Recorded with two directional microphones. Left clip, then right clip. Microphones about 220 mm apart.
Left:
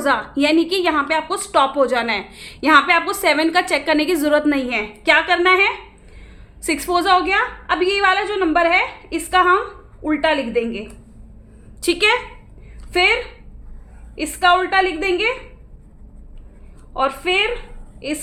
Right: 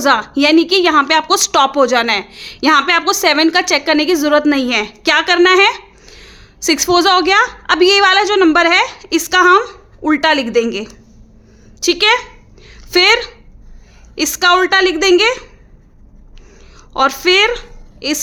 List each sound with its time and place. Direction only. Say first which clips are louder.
0.0 s a woman's voice: right 6 dB; 30° right (ahead or behind)
11.8 s a woman's voice: right 4 dB; 25° right (ahead or behind)
12.6 s a sound: right 5 dB; 40° right (ahead or behind)
14.2 s a woman's voice: right 4 dB; 40° right (ahead or behind)
16.9 s a woman's voice: right 7 dB; 45° right (ahead or behind)